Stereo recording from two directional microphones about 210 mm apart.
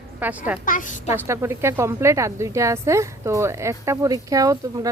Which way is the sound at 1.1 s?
15° right (ahead or behind).